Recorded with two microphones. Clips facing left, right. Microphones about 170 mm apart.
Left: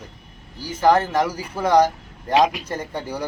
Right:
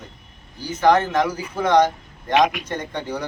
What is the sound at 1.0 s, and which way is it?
Speech, 35° left (ahead or behind).